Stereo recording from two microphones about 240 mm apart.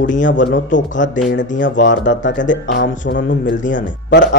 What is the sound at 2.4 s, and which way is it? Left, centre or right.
Speech, left.